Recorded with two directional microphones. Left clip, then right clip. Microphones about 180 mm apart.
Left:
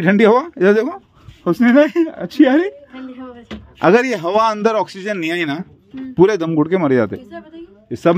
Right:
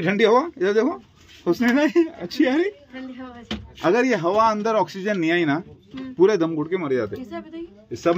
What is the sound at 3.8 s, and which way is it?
A man's voice, 50° left (ahead or behind).